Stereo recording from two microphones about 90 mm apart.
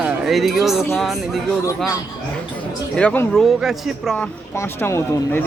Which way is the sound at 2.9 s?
15° left (ahead or behind).